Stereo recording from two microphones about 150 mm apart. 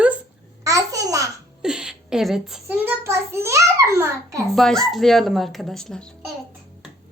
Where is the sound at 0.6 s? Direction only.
20° right (ahead or behind).